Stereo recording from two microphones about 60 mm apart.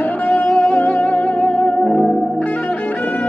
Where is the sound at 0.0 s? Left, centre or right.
Left.